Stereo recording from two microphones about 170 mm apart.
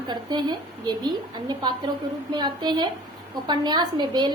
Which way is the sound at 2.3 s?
25° right (ahead or behind).